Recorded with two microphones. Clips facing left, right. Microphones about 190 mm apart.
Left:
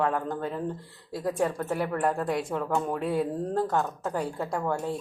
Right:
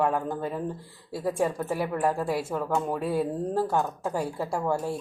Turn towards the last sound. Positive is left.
turn(degrees=-5)  # may be behind; listen again after turning